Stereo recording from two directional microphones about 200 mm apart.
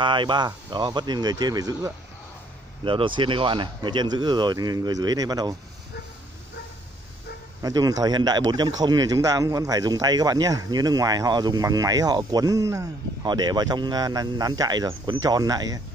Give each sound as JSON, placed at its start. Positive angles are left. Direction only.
{"t": 0.0, "sound": "speech", "side_deg": -25}
{"t": 7.6, "sound": "speech", "side_deg": -20}